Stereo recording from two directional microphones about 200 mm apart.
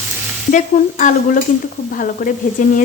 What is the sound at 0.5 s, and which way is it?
Frying, 40° left (ahead or behind).